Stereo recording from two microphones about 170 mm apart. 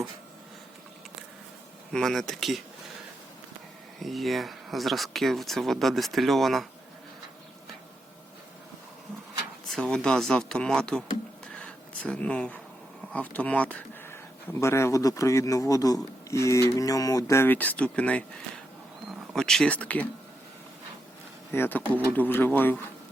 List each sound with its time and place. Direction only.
1.9 s speech: centre (ahead or behind)
4.0 s speech: centre (ahead or behind)
9.6 s speech: 5° left (ahead or behind)
11.5 s a sound: 5° left (ahead or behind)
13.1 s speech: 10° left (ahead or behind)
21.5 s speech: 10° left (ahead or behind)